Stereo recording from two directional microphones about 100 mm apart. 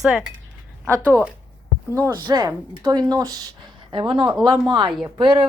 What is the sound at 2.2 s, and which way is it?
A woman's voice, 40° right (ahead or behind).